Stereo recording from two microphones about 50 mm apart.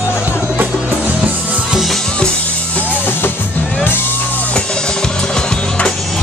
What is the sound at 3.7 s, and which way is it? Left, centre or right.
Music, left.